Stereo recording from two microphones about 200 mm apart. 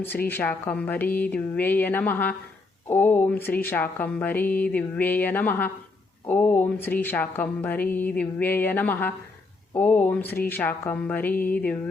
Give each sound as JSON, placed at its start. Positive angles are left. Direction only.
{"t": 0.0, "sound": "speech", "side_deg": 10}